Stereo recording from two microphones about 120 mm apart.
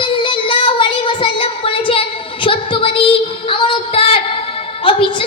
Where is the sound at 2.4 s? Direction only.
45° left (ahead or behind).